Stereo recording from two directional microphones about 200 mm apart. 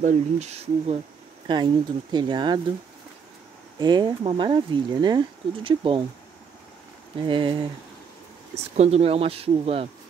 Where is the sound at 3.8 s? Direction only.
20° right (ahead or behind).